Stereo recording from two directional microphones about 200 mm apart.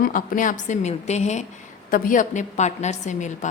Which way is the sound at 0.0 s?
45° left (ahead or behind).